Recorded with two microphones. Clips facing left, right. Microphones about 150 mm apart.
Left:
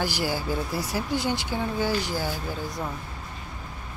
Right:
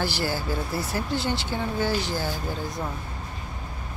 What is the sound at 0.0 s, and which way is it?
Speech, 15° left (ahead or behind).